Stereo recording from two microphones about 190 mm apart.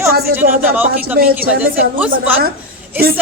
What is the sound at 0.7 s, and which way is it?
Speech, 10° right (ahead or behind).